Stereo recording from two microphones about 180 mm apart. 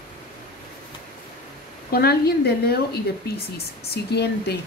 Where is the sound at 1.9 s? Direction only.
60° left (ahead or behind).